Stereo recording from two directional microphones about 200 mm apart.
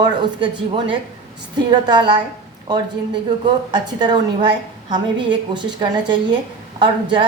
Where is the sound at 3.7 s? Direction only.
20° right (ahead or behind).